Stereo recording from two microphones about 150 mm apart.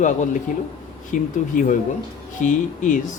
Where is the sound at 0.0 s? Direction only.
55° left (ahead or behind).